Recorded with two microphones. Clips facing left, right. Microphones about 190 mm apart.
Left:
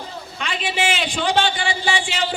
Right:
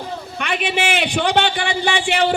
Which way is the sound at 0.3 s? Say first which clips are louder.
Right 3 dB; 60° right (ahead or behind).